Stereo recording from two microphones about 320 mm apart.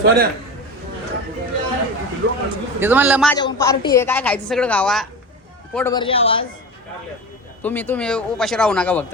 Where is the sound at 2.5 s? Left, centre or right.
Centre.